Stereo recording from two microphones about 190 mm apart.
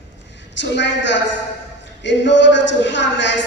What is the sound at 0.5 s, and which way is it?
A man's voice, 65° left (ahead or behind).